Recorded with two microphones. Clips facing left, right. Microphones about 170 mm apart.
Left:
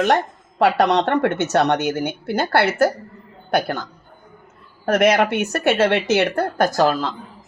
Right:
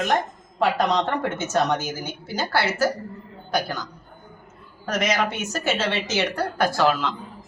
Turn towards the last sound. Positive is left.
turn(degrees=40)  # may be behind; listen again after turning